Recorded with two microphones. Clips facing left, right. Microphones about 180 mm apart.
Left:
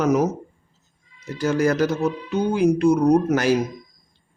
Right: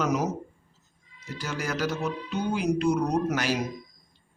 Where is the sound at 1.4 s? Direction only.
50° left (ahead or behind).